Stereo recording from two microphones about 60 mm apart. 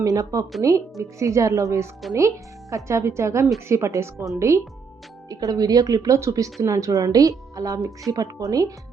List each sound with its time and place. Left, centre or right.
0.0 s speech: right
5.3 s speech: right